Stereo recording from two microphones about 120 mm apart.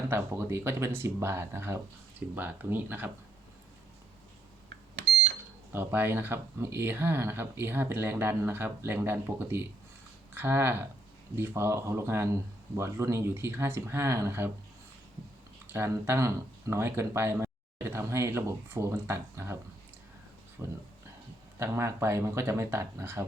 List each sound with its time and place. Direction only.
0.1 s speech: 20° right (ahead or behind)
5.7 s speech: 20° right (ahead or behind)
15.7 s speech: 20° right (ahead or behind)
20.6 s speech: 20° right (ahead or behind)